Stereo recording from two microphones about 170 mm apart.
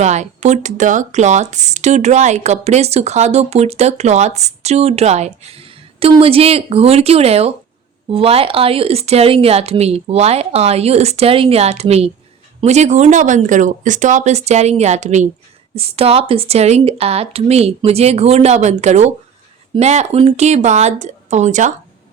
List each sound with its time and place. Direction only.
0.0 s speech: 45° right (ahead or behind)